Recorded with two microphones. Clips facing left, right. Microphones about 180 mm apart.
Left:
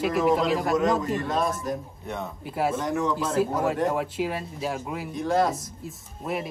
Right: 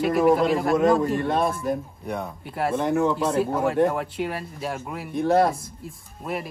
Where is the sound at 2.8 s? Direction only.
55° right (ahead or behind).